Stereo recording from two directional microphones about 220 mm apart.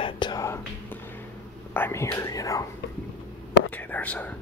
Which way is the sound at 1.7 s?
10° left (ahead or behind).